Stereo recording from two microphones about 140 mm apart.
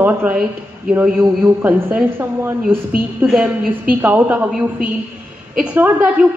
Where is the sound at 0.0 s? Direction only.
10° right (ahead or behind).